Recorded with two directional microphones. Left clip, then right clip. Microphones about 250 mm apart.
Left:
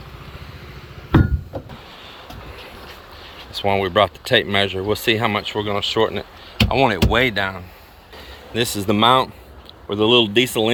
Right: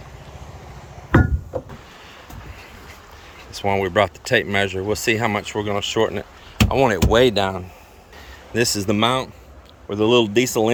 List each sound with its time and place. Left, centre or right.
3.6 s speech: centre
8.9 s speech: centre